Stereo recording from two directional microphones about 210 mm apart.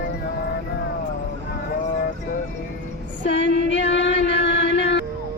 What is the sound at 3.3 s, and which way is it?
Music, 55° left (ahead or behind).